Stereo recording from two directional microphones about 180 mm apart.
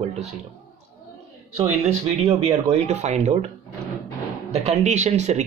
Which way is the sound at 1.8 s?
35° right (ahead or behind).